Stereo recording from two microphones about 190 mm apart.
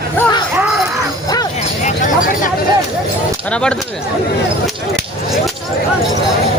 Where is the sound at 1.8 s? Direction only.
40° left (ahead or behind).